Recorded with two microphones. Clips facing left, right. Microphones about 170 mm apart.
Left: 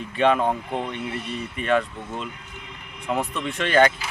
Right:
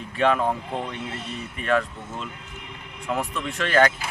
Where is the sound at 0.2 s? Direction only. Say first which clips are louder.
Left 2 dB; centre (ahead or behind).